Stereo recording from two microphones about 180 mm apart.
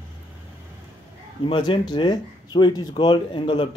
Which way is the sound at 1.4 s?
25° left (ahead or behind).